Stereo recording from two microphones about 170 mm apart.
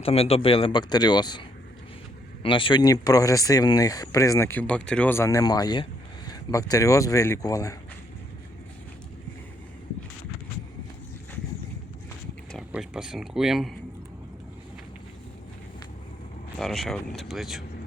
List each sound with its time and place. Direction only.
0.0 s speech: 35° left (ahead or behind); by 7.8 s 20° left (ahead or behind)
12.7 s speech: 5° right (ahead or behind)
16.6 s speech: centre (ahead or behind)